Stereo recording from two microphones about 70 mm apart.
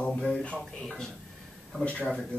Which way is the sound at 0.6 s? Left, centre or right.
Centre.